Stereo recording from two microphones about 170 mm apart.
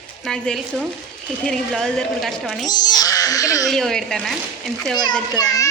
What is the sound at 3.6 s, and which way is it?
Speech, centre (ahead or behind).